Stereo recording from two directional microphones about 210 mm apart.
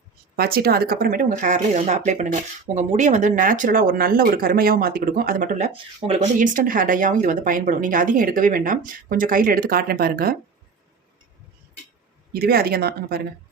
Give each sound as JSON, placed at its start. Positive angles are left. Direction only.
{"t": 0.3, "sound": "speech", "side_deg": -45}
{"t": 12.3, "sound": "speech", "side_deg": -45}